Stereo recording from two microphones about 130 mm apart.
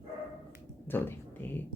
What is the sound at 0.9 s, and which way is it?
Speech, 15° left (ahead or behind).